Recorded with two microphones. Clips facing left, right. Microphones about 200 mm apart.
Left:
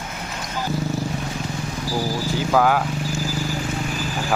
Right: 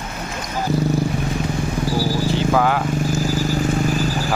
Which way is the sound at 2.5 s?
5° left (ahead or behind).